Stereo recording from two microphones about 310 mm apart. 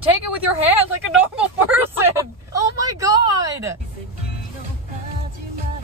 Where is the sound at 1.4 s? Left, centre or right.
Centre.